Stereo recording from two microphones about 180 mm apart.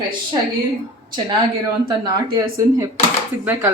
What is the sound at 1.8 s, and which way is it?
A man's voice, 20° right (ahead or behind).